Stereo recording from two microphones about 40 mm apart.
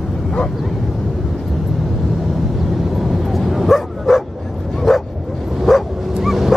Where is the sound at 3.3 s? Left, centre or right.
Centre.